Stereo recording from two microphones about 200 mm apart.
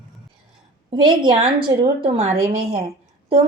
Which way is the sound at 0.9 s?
20° right (ahead or behind).